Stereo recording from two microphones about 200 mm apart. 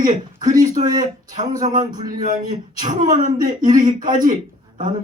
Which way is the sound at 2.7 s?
40° right (ahead or behind).